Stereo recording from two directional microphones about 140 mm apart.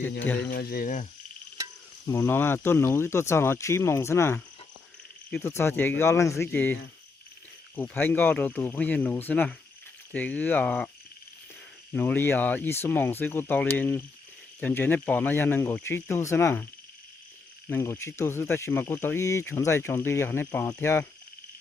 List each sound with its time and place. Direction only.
0.5 s speech: 90° left
2.0 s speech: 20° left (ahead or behind)
5.4 s speech: 20° left (ahead or behind)
7.8 s speech: 15° left (ahead or behind)
11.9 s speech: 15° left (ahead or behind)
17.7 s speech: 20° left (ahead or behind)